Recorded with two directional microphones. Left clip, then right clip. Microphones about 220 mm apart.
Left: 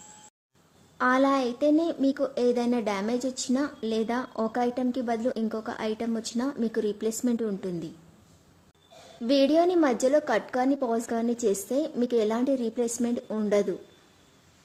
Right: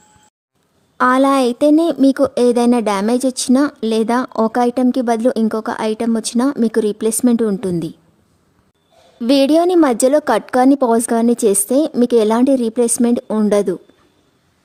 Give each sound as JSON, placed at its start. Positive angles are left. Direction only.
{"t": 0.9, "sound": "speech", "side_deg": -50}
{"t": 9.2, "sound": "speech", "side_deg": -50}